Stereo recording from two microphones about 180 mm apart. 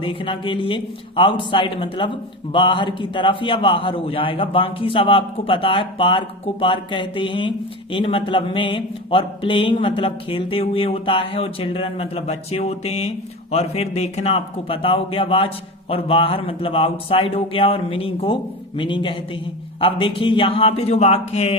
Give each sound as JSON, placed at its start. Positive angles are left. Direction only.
{"t": 0.0, "sound": "a man's voice", "side_deg": 30}